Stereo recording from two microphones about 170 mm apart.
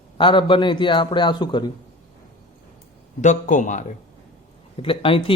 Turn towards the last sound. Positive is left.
turn(degrees=30)  # may be behind; listen again after turning